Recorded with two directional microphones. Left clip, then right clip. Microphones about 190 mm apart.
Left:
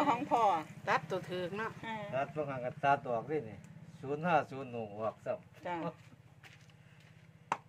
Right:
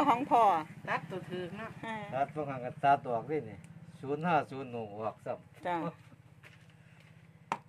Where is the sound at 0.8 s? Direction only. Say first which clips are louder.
Left 3 dB; 60° left (ahead or behind).